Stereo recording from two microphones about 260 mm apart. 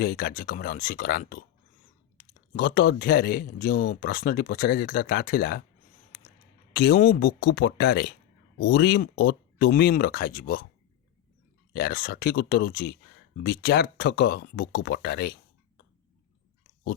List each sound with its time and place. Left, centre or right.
0.0 s speech: left
6.7 s speech: left
11.7 s speech: left